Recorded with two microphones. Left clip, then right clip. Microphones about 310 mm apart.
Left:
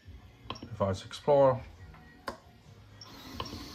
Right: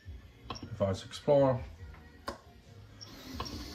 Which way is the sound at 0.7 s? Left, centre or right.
Centre.